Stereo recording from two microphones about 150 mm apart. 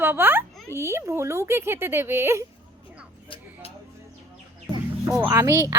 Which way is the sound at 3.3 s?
35° left (ahead or behind).